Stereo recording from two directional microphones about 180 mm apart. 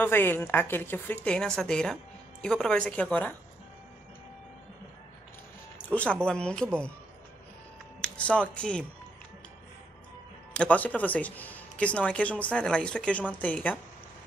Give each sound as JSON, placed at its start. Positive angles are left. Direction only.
{"t": 0.0, "sound": "speech", "side_deg": 10}
{"t": 6.2, "sound": "speech", "side_deg": 5}
{"t": 8.0, "sound": "speech", "side_deg": 5}
{"t": 10.5, "sound": "speech", "side_deg": 5}